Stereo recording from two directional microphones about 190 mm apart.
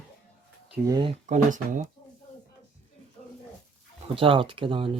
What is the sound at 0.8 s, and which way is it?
Speech, 20° right (ahead or behind).